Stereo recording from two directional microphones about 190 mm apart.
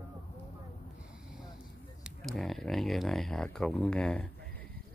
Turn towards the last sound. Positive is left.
turn(degrees=5)  # may be behind; listen again after turning